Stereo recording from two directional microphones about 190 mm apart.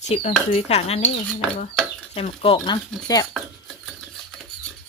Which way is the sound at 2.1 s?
30° left (ahead or behind).